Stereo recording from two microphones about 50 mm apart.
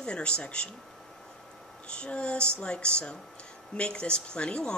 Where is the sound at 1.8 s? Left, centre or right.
Centre.